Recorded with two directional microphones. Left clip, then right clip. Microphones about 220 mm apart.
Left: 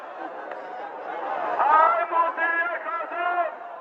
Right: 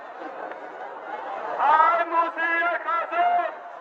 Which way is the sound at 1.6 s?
55° right (ahead or behind).